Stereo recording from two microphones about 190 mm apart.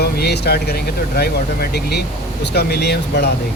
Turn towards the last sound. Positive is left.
turn(degrees=60)  # may be behind; listen again after turning